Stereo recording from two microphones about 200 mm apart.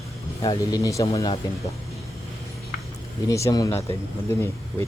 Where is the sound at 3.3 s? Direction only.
15° left (ahead or behind).